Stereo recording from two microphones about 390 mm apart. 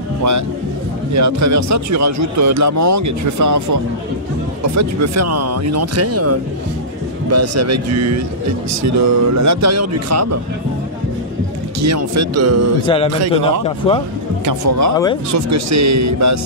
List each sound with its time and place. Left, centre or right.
1.1 s speech: right
11.8 s speech: right
12.8 s a man's voice: centre
14.4 s speech: right